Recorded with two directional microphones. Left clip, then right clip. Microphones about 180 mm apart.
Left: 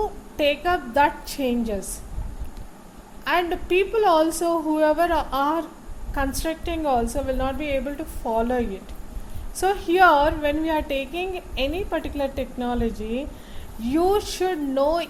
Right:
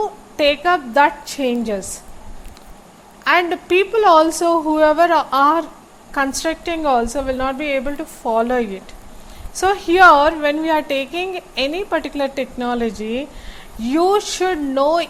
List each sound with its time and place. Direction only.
0.0 s a woman's voice: 15° right (ahead or behind)
3.2 s a woman's voice: 15° right (ahead or behind)